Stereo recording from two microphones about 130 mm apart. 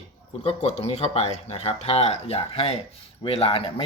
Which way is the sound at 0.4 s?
55° left (ahead or behind).